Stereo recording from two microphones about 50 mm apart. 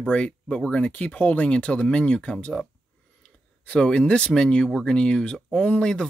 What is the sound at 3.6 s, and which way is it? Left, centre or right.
Speech, centre.